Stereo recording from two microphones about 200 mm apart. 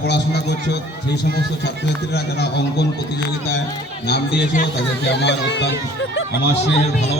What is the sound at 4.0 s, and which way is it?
A man's voice, 55° left (ahead or behind).